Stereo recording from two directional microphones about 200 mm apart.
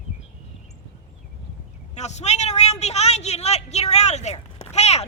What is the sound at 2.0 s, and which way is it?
A man's voice, 35° left (ahead or behind).